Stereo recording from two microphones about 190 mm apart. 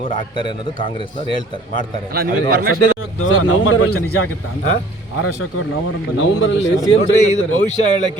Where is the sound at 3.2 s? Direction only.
90° left.